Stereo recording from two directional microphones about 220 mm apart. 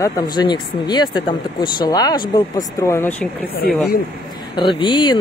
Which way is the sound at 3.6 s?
45° left (ahead or behind).